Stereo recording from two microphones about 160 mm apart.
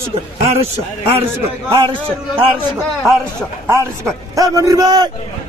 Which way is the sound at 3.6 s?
15° right (ahead or behind).